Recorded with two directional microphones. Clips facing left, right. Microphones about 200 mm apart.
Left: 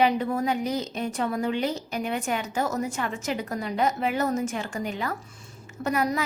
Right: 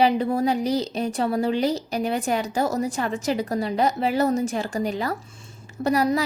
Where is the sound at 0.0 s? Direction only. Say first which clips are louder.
Right 3 dB; 30° right (ahead or behind).